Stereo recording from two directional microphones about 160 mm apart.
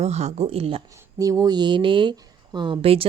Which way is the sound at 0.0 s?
45° right (ahead or behind).